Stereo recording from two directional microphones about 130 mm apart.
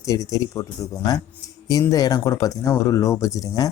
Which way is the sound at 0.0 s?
25° left (ahead or behind).